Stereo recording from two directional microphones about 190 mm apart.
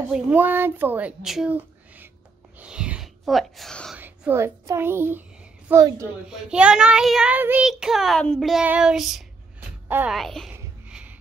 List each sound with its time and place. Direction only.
0.1 s a child's voice: 10° right (ahead or behind)
2.6 s a sound: 5° right (ahead or behind)
4.0 s a child's voice: 10° right (ahead or behind)
6.2 s child singing: 5° right (ahead or behind)
9.8 s speech: 10° right (ahead or behind)
10.1 s child singing: centre (ahead or behind)
10.5 s a sound: 10° right (ahead or behind)